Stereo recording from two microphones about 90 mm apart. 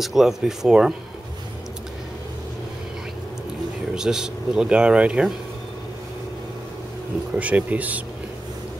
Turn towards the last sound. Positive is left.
turn(degrees=-15)  # may be behind; listen again after turning